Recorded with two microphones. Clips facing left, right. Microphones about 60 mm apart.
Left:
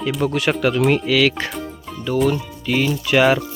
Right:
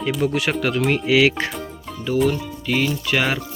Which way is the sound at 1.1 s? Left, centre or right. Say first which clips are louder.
Right 1 dB; centre.